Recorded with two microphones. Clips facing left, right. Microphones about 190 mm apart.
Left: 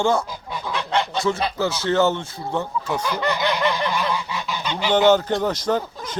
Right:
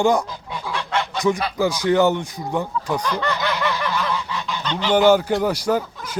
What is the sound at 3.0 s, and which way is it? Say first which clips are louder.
Goose: left 1 dB; 10° left (ahead or behind).